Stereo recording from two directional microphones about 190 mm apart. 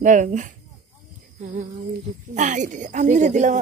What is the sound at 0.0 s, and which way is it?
A woman's voice, 40° right (ahead or behind).